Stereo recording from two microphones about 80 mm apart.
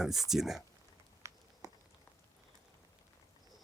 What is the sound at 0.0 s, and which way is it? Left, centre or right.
Speech, centre.